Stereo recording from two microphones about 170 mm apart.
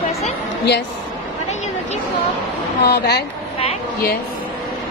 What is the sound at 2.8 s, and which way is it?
Speech, 75° left (ahead or behind).